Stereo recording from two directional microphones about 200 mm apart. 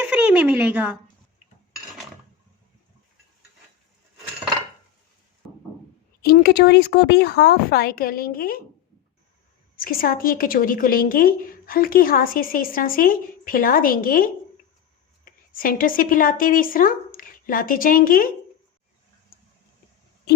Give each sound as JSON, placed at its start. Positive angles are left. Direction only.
{"t": 0.0, "sound": "speech", "side_deg": -5}
{"t": 6.2, "sound": "a woman's voice", "side_deg": 50}
{"t": 9.7, "sound": "a woman's voice", "side_deg": 45}